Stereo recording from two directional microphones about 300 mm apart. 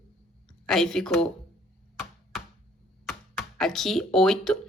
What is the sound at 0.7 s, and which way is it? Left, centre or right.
Speech, centre.